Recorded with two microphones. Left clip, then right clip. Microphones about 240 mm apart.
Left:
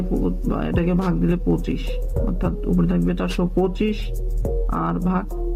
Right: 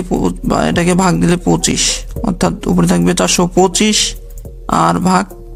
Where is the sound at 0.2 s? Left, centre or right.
Right.